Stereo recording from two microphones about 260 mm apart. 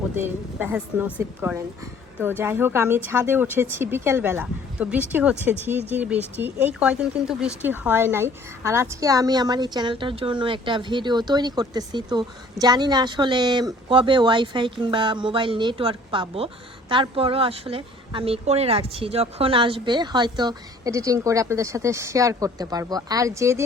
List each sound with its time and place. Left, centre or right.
0.2 s speech: centre